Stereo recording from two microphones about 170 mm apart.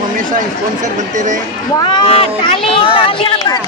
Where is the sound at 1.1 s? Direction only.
45° right (ahead or behind).